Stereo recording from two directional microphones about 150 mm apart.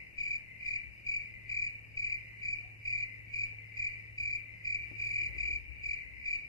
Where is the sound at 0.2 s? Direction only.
25° left (ahead or behind).